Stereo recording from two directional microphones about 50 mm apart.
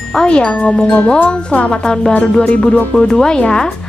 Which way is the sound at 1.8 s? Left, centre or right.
Centre.